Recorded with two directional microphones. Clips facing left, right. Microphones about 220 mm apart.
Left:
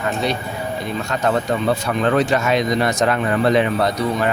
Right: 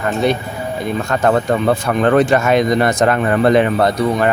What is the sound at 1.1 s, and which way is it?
Speech, 50° right (ahead or behind).